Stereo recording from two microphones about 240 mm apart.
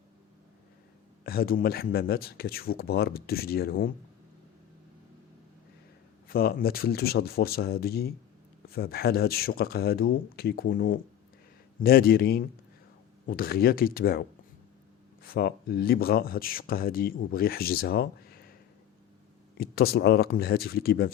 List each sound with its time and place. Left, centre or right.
1.2 s speech: left
6.2 s speech: left
19.5 s speech: left